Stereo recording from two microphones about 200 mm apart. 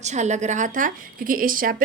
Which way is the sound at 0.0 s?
35° right (ahead or behind).